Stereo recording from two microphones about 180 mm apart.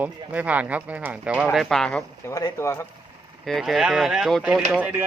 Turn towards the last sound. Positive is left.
turn(degrees=-10)  # may be behind; listen again after turning